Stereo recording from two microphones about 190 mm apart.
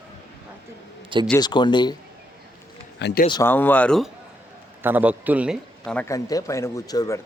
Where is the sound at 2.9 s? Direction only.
60° left (ahead or behind).